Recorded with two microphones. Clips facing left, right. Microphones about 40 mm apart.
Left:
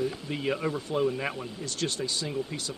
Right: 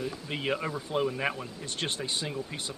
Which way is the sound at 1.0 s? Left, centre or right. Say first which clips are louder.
Left 1 dB; centre.